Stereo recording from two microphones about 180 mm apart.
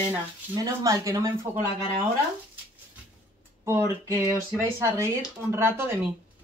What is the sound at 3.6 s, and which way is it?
Speech, 15° right (ahead or behind).